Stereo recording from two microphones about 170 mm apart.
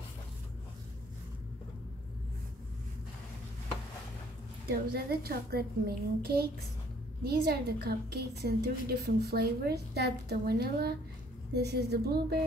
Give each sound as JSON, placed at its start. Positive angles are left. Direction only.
{"t": 4.6, "sound": "a woman's voice", "side_deg": -65}